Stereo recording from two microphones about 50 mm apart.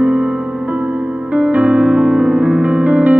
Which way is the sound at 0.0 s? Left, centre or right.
Right.